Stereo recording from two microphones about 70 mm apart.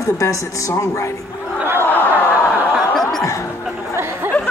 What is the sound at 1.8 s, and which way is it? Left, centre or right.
Snicker, left.